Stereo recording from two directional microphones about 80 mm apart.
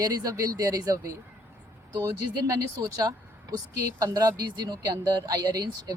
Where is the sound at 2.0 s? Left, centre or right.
Right.